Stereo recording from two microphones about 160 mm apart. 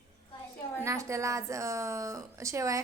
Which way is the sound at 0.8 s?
20° right (ahead or behind).